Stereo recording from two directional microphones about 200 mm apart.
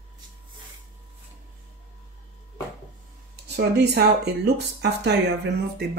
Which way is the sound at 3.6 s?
60° right (ahead or behind).